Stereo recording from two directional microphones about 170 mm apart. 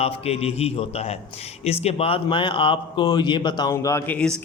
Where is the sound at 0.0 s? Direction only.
35° left (ahead or behind).